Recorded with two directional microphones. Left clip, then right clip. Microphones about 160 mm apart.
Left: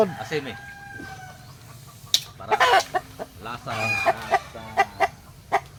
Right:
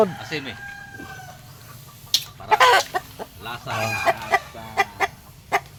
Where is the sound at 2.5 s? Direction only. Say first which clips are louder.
Right 3 dB; 30° right (ahead or behind).